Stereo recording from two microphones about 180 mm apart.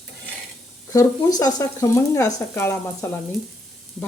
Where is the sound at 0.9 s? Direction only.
20° left (ahead or behind).